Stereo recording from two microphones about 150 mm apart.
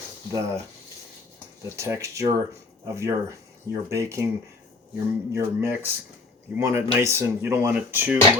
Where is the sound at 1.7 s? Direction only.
20° right (ahead or behind).